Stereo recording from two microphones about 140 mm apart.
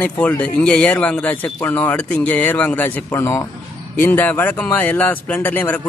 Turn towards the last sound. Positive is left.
turn(degrees=10)  # may be behind; listen again after turning